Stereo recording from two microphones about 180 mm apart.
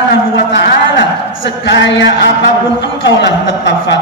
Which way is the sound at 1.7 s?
75° left (ahead or behind).